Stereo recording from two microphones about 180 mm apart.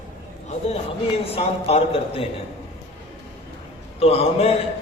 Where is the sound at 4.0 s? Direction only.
35° left (ahead or behind).